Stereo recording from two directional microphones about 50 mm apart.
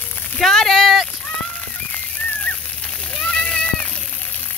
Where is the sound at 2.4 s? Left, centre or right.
Left.